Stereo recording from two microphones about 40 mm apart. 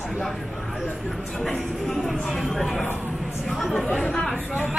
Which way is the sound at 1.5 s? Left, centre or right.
Centre.